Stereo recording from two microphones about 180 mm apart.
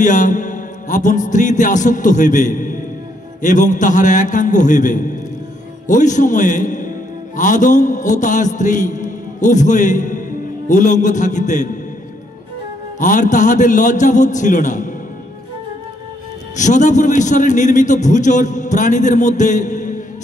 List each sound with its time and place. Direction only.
0.0 s music: 45° left (ahead or behind)
3.3 s a man's voice: 45° left (ahead or behind)
13.0 s a man's voice: 45° left (ahead or behind)
16.5 s a man's voice: 45° left (ahead or behind)